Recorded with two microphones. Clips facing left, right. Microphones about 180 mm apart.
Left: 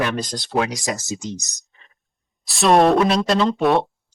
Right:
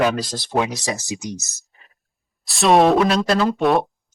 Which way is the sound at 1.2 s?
15° right (ahead or behind).